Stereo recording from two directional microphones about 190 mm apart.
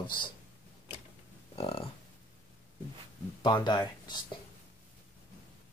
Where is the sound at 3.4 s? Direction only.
25° left (ahead or behind).